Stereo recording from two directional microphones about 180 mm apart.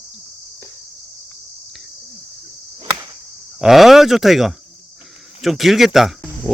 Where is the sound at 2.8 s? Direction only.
15° right (ahead or behind).